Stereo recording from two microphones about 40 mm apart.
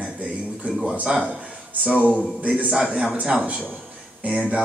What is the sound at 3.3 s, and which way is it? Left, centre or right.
Speech, centre.